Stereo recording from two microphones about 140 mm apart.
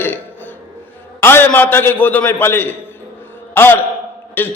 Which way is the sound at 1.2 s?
15° left (ahead or behind).